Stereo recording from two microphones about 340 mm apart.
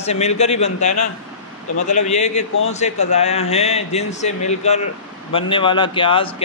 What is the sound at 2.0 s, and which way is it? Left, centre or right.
A man's voice, centre.